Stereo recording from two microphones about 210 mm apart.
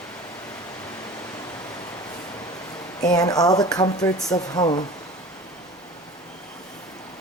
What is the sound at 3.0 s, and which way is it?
Speech, 20° left (ahead or behind).